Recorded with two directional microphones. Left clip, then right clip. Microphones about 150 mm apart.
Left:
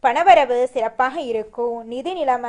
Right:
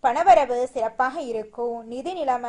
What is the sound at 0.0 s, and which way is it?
A woman's voice, 20° left (ahead or behind).